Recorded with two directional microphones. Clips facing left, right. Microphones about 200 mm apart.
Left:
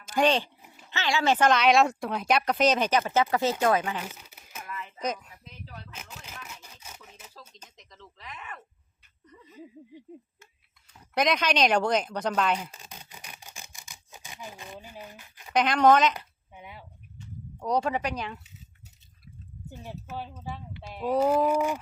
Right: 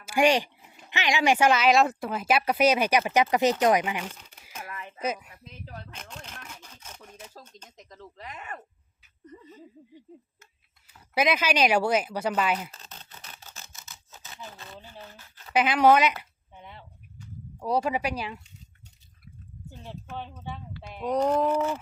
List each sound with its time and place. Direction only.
0.0 s speech: 10° right (ahead or behind)
4.0 s crumpling: 10° left (ahead or behind)
4.6 s a sound: 55° right (ahead or behind)
4.9 s speech: 5° right (ahead or behind)
5.9 s a sound: 5° left (ahead or behind)
7.8 s speech: 45° right (ahead or behind)
11.1 s speech: 5° right (ahead or behind)
12.7 s camera: 10° left (ahead or behind)
15.5 s speech: 5° right (ahead or behind)
16.1 s a sound: 10° left (ahead or behind)
17.6 s speech: 5° right (ahead or behind)
19.7 s speech: 10° left (ahead or behind)